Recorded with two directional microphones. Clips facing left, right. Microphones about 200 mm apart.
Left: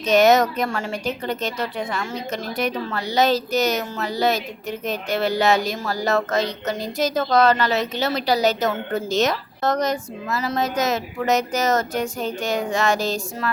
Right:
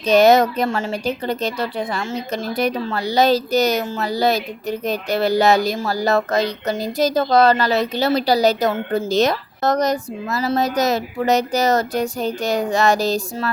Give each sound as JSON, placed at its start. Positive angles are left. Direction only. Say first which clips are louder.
{"t": 0.0, "sound": "speech", "louder": "right 3 dB", "side_deg": -35}